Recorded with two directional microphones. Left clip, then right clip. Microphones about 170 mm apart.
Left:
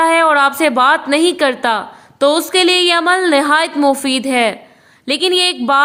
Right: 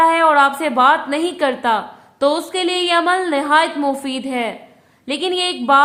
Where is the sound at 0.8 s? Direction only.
30° left (ahead or behind).